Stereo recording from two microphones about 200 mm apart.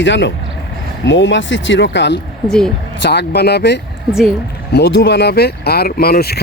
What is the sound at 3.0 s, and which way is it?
Speech, 55° left (ahead or behind).